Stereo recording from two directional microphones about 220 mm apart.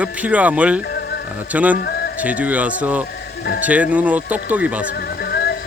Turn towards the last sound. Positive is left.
turn(degrees=45)  # may be behind; listen again after turning